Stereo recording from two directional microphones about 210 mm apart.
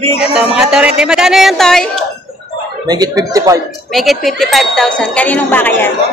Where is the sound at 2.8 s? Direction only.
20° right (ahead or behind).